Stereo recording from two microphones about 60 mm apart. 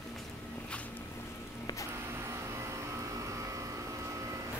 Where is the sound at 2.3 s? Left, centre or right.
Right.